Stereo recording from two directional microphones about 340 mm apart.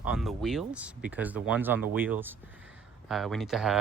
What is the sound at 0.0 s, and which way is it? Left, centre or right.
Speech, centre.